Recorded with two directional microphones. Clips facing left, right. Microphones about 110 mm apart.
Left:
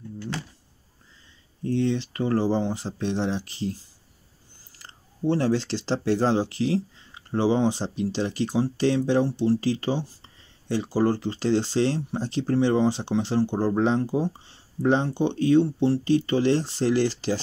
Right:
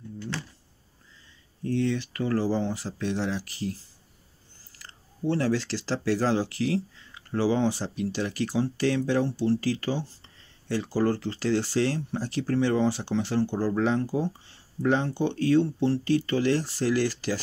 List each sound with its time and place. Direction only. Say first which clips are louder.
1.6 s speech: left 2 dB; 25° left (ahead or behind)
4.7 s speech: left 2 dB; 20° left (ahead or behind)